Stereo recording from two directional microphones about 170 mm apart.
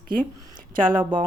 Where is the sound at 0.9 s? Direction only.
30° right (ahead or behind).